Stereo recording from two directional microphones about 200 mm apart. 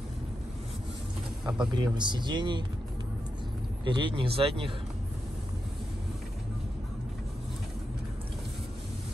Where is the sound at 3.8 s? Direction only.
25° right (ahead or behind).